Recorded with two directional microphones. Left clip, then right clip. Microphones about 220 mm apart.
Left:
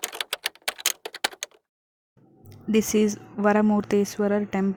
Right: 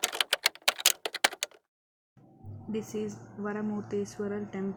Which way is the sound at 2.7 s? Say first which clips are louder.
Left 13 dB; 45° left (ahead or behind).